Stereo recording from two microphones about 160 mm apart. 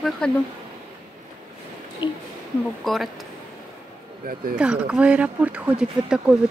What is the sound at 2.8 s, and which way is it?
Speech, centre (ahead or behind).